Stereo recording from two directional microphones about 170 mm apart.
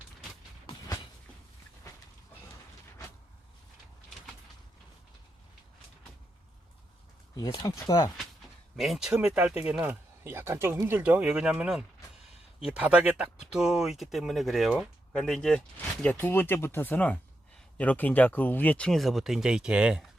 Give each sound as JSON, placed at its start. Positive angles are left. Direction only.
{"t": 7.3, "sound": "speech", "side_deg": 25}
{"t": 8.7, "sound": "speech", "side_deg": 0}